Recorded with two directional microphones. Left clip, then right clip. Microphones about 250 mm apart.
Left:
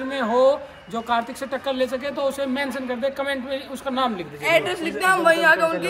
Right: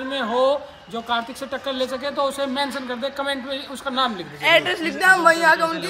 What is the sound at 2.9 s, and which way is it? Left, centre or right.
Speech, centre.